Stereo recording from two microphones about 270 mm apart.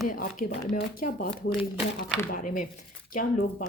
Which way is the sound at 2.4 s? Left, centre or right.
Left.